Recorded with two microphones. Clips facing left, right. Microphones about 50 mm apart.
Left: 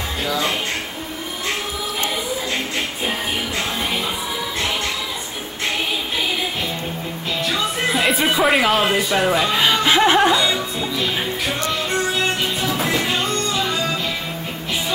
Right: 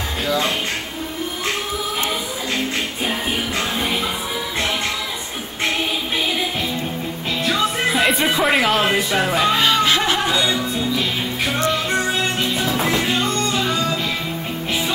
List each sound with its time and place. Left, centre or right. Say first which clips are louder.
7.5 s speech: right 2 dB; centre
9.6 s chuckle: left 1 dB; centre